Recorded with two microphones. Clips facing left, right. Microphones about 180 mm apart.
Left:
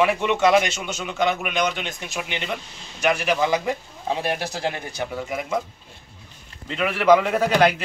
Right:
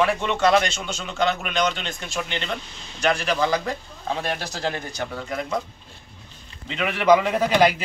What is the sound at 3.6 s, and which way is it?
A man's voice, 20° left (ahead or behind).